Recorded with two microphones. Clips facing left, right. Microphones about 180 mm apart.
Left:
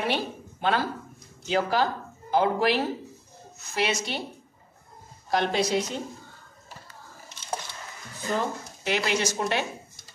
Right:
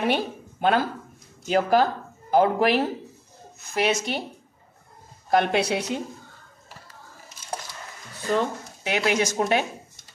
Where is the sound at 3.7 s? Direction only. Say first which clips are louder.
Right 4 dB; 50° right (ahead or behind).